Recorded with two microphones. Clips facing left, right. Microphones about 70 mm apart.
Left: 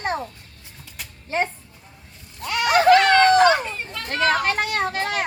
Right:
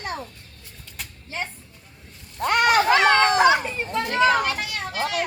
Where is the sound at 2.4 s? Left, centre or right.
Right.